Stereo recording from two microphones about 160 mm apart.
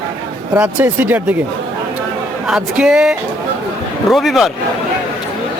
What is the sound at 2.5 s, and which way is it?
Speech, 5° right (ahead or behind).